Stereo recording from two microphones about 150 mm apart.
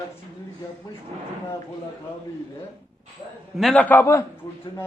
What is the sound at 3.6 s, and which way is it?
Speech, 5° left (ahead or behind).